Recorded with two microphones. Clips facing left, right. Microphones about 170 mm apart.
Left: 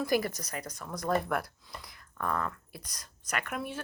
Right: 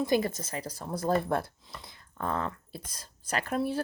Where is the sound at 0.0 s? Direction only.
25° right (ahead or behind).